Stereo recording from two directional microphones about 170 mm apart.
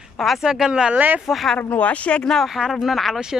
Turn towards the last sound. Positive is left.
turn(degrees=0)  # may be behind; listen again after turning